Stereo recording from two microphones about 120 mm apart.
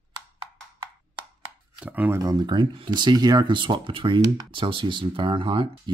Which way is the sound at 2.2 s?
35° right (ahead or behind).